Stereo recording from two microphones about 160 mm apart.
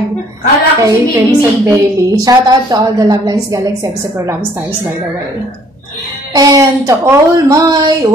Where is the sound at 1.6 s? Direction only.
20° right (ahead or behind).